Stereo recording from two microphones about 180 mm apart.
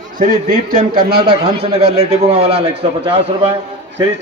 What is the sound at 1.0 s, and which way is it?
Speech, 60° right (ahead or behind).